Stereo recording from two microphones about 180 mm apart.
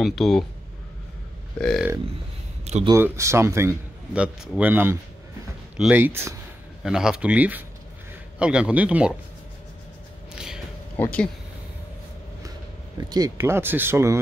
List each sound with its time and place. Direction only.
0.0 s a man's voice: centre (ahead or behind)
1.6 s a man's voice: 5° left (ahead or behind)
2.6 s a sound: 35° right (ahead or behind)
2.9 s a man's voice: 15° right (ahead or behind)
10.3 s a sound: 5° right (ahead or behind)
11.0 s speech: 10° left (ahead or behind)
12.9 s a man's voice: 20° right (ahead or behind)